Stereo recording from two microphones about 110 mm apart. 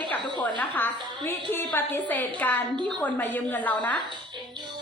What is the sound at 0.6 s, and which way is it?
A woman's voice, 15° left (ahead or behind).